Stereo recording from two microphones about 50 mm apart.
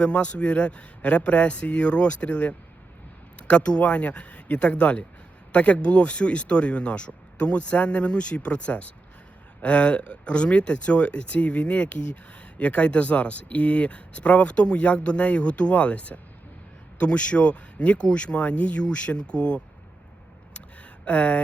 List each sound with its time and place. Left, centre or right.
0.0 s speech: left
21.0 s speech: left